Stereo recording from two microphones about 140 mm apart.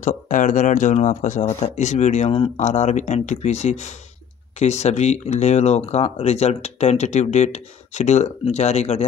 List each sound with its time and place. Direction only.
0.0 s speech: 65° left (ahead or behind)